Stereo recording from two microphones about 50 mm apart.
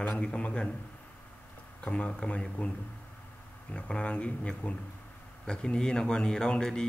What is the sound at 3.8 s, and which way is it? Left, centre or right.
A man's voice, left.